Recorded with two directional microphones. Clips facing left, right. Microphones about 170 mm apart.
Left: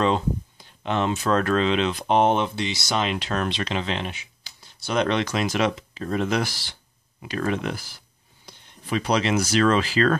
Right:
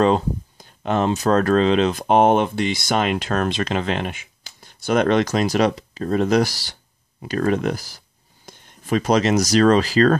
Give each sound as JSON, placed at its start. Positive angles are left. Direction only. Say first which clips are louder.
{"t": 0.0, "sound": "speech", "louder": "right 5 dB", "side_deg": -45}